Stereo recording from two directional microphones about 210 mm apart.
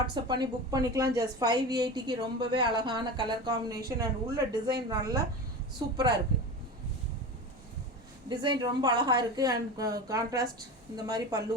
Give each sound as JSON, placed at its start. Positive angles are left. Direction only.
{"t": 0.0, "sound": "speech", "side_deg": -20}
{"t": 8.3, "sound": "a woman's voice", "side_deg": -20}